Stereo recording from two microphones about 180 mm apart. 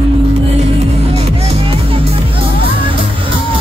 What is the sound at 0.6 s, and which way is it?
Music, 35° right (ahead or behind).